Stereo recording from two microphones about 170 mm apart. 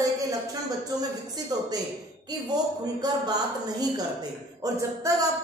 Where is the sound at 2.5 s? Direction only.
25° right (ahead or behind).